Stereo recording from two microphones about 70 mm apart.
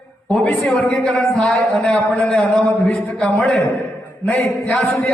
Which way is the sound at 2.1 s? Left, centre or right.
Centre.